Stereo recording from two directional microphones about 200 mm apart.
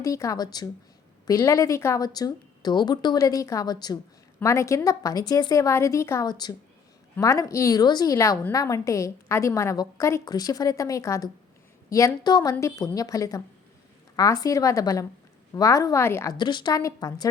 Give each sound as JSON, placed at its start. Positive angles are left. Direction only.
{"t": 0.0, "sound": "a woman's voice", "side_deg": 15}